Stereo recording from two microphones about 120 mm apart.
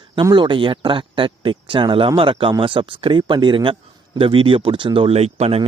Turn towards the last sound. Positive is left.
turn(degrees=-55)  # may be behind; listen again after turning